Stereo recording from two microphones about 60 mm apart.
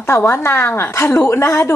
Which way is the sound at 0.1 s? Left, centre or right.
Left.